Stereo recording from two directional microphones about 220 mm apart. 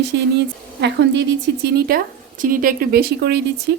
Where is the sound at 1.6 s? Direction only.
40° right (ahead or behind).